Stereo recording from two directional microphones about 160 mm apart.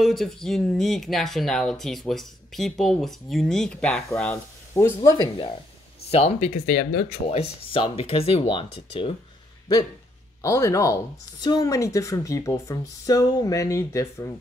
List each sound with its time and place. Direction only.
0.0 s speech: centre (ahead or behind); by 5.5 s 25° left (ahead or behind)
6.0 s speech: 40° left (ahead or behind)
7.2 s speech: 35° left (ahead or behind)
10.4 s speech: 20° left (ahead or behind)